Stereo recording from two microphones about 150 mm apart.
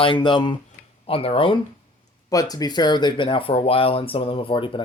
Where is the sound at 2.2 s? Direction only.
25° left (ahead or behind).